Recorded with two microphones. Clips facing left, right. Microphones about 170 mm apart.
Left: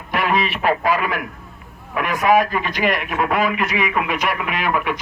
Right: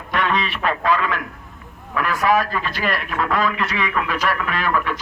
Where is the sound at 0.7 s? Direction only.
20° left (ahead or behind).